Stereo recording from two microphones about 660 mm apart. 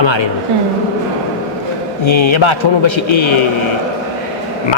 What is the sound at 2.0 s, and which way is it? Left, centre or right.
Speech, left.